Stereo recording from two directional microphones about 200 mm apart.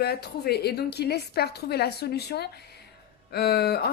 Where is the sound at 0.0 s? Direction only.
55° left (ahead or behind).